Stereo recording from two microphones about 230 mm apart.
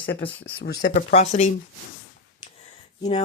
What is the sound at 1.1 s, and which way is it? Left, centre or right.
Speech, left.